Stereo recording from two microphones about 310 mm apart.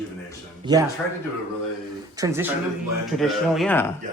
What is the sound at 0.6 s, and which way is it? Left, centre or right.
Speech, centre.